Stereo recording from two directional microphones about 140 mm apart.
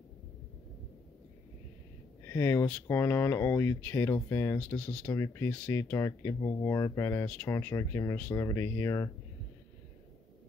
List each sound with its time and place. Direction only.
2.2 s speech: 15° left (ahead or behind)
5.1 s speech: 20° left (ahead or behind)